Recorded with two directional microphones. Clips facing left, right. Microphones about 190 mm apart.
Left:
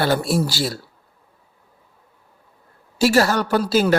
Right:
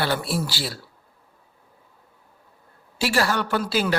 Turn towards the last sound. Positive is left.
turn(degrees=45)  # may be behind; listen again after turning